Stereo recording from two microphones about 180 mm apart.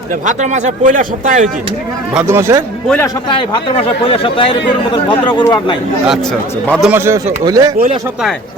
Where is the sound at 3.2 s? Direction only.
30° left (ahead or behind).